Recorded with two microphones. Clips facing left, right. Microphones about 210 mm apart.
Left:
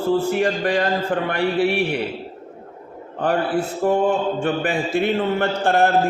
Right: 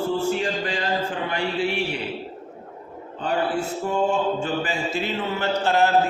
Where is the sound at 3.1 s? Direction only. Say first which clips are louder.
Left 4 dB; 60° left (ahead or behind).